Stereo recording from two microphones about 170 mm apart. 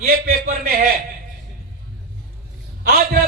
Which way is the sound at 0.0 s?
60° right (ahead or behind).